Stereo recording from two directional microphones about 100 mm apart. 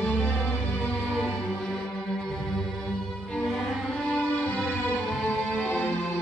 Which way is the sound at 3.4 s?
Centre (ahead or behind).